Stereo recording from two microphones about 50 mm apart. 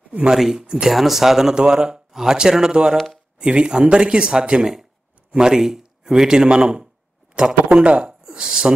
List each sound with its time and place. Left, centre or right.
0.3 s a man's voice: centre